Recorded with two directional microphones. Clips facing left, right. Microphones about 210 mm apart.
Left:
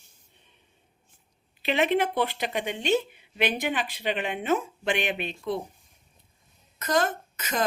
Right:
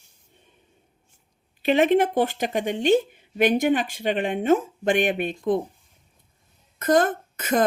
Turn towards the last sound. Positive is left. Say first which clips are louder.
# right 8 dB
turn(degrees=-55)  # may be behind; listen again after turning